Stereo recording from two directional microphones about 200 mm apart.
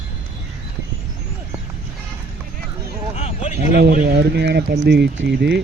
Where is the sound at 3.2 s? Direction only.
35° left (ahead or behind).